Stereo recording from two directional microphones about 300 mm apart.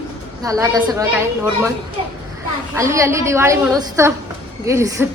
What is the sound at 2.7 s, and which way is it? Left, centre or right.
A woman's voice, centre.